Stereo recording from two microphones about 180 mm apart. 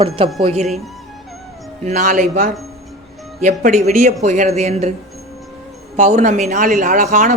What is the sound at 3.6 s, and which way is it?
Speech, 45° right (ahead or behind).